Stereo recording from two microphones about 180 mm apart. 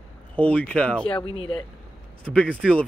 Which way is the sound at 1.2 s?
30° left (ahead or behind).